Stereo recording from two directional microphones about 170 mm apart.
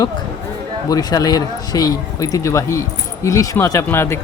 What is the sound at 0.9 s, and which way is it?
Speech, 20° left (ahead or behind).